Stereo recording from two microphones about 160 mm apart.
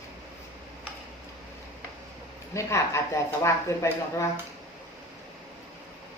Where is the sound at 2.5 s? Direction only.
20° left (ahead or behind).